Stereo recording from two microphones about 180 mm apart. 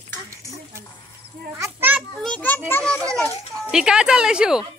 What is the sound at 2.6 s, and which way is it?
Children playing, 10° left (ahead or behind).